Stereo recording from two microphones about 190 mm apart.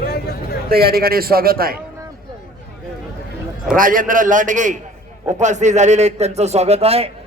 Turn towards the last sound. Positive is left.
turn(degrees=-30)  # may be behind; listen again after turning